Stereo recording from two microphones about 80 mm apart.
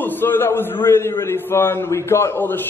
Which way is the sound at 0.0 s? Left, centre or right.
Left.